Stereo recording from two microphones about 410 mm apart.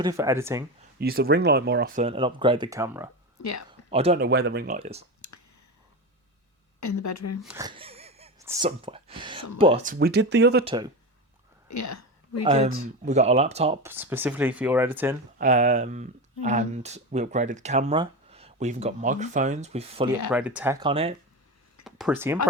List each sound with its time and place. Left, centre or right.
0.0 s speech: centre
0.9 s speech: right
6.7 s a woman's voice: left
7.4 s speech: centre; by 10.7 s right
10.7 s speech: centre
11.7 s a woman's voice: left
13.1 s speech: centre
15.4 s speech: centre
20.3 s speech: centre
21.8 s speech: centre